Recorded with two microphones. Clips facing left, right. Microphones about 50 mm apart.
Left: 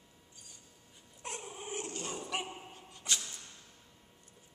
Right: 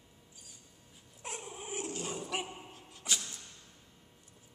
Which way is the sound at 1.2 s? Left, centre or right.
Centre.